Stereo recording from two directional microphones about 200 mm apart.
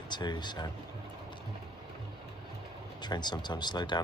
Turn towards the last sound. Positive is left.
turn(degrees=20)  # may be behind; listen again after turning